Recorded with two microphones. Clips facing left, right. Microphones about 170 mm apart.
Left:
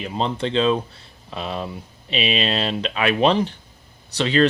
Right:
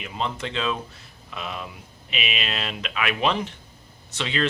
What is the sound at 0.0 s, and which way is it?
Speech, 35° left (ahead or behind).